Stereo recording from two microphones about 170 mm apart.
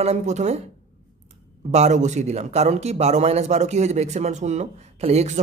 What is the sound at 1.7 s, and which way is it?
A man's voice, 40° right (ahead or behind).